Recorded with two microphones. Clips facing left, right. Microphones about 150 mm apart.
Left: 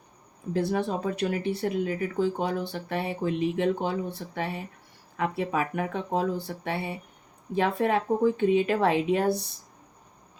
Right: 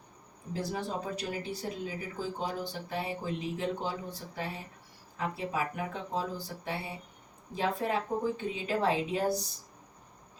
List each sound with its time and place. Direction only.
0.5 s speech: 60° left (ahead or behind)